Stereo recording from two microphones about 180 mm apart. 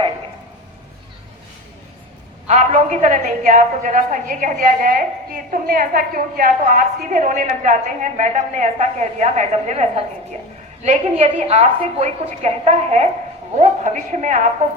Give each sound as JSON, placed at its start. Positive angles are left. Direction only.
{"t": 2.5, "sound": "a woman's voice", "side_deg": -40}